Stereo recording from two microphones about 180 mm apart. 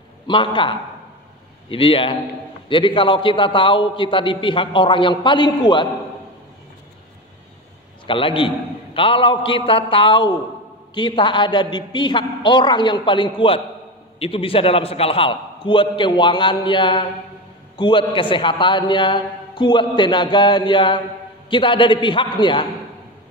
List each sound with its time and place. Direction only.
0.3 s a man's voice: 25° left (ahead or behind)
8.1 s a man's voice: 30° left (ahead or behind)